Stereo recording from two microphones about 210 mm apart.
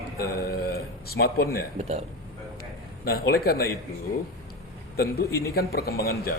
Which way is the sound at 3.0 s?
45° left (ahead or behind).